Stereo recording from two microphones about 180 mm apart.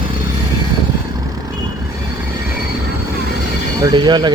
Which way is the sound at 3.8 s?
20° right (ahead or behind).